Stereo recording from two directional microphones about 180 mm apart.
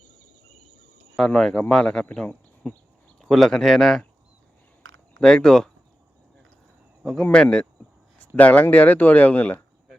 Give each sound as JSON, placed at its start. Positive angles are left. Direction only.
{"t": 1.1, "sound": "speech", "side_deg": 0}
{"t": 4.8, "sound": "a sound", "side_deg": -90}
{"t": 5.2, "sound": "speech", "side_deg": 5}
{"t": 7.0, "sound": "speech", "side_deg": 5}